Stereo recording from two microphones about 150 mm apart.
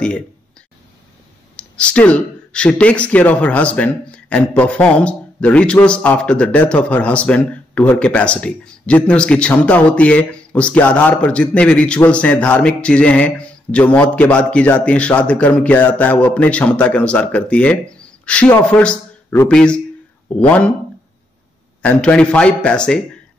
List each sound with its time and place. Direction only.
1.6 s speech: 5° left (ahead or behind)
21.8 s speech: 5° left (ahead or behind)